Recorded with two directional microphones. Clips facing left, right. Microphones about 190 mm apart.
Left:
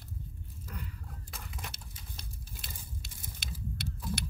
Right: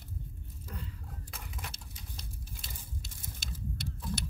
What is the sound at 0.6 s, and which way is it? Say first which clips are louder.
Wild animals: even; 25° right (ahead or behind).